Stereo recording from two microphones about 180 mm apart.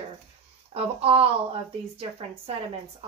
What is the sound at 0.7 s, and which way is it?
Speech, 30° right (ahead or behind).